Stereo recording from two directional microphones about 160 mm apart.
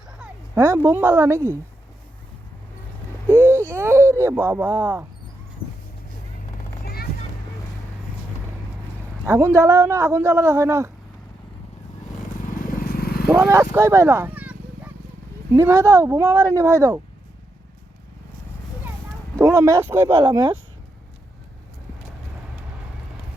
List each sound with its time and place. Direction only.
0.5 s speech: 15° right (ahead or behind)
3.3 s a sound: 15° right (ahead or behind)
3.7 s speech: 15° right (ahead or behind)
6.8 s music: 75° left (ahead or behind)
9.2 s speech: 15° right (ahead or behind)
12.5 s vehicle: 65° left (ahead or behind)
13.3 s speech: 15° right (ahead or behind)
15.5 s speech: 15° right (ahead or behind)
19.4 s speech: 15° right (ahead or behind)
20.2 s speech: 30° right (ahead or behind)